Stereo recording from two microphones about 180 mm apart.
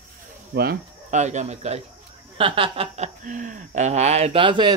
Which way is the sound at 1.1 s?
40° right (ahead or behind).